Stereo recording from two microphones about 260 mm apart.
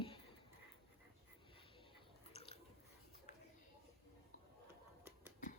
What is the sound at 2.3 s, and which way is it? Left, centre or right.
Chewing, left.